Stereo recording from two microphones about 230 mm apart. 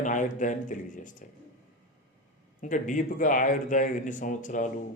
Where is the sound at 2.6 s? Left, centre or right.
Left.